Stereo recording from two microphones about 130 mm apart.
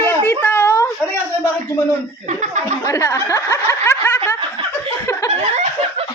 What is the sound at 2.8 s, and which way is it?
Speech, 25° left (ahead or behind).